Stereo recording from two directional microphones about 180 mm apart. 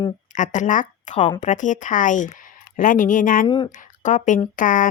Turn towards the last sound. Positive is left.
turn(degrees=50)  # may be behind; listen again after turning